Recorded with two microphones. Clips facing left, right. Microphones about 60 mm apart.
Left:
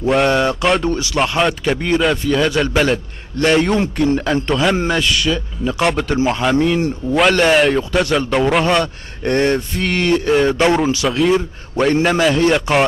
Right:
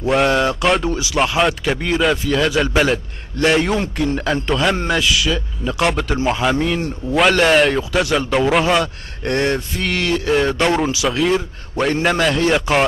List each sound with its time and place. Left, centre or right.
0.0 s speech: centre